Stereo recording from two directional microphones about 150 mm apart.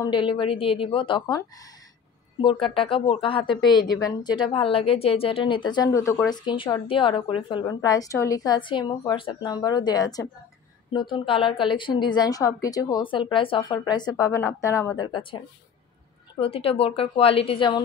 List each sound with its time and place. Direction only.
0.0 s a woman's voice: 35° left (ahead or behind)
2.6 s a woman's voice: 35° left (ahead or behind); by 15.0 s 20° left (ahead or behind)
16.3 s a woman's voice: 40° left (ahead or behind)